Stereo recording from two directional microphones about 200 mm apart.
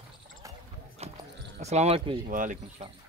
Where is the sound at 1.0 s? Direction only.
30° right (ahead or behind).